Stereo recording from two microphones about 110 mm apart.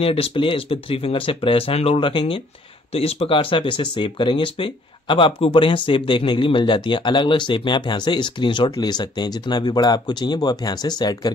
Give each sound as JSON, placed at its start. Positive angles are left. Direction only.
{"t": 0.0, "sound": "speech", "side_deg": 60}
{"t": 2.9, "sound": "speech", "side_deg": 65}